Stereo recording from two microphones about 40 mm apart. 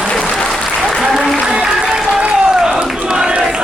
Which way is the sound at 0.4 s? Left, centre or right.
Centre.